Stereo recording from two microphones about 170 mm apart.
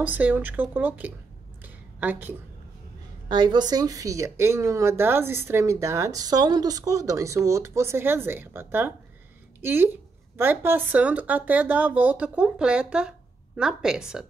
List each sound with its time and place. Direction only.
0.0 s speech: 10° right (ahead or behind)
1.6 s a sound: 10° right (ahead or behind)
3.3 s speech: 25° right (ahead or behind); by 14.2 s 5° right (ahead or behind)